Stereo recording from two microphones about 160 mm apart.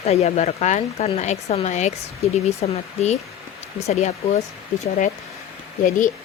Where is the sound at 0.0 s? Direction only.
40° left (ahead or behind).